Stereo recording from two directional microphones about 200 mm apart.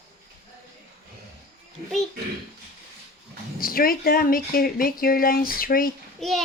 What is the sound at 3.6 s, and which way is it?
Speech, 45° left (ahead or behind).